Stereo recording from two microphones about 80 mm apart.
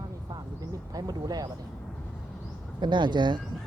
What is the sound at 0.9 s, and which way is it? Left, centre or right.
Speech, right.